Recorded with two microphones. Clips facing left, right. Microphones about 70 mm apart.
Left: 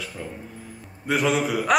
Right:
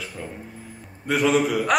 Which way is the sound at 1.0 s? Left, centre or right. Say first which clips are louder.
Right 2 dB; centre.